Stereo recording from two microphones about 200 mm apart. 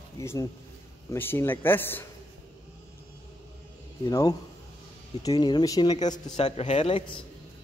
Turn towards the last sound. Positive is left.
turn(degrees=30)  # may be behind; listen again after turning